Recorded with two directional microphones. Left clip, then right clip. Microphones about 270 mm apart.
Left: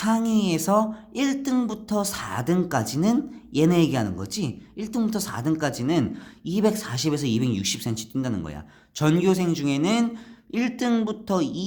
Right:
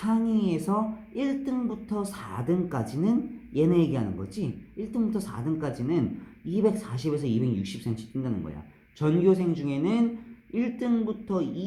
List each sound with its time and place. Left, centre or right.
0.0 s speech: left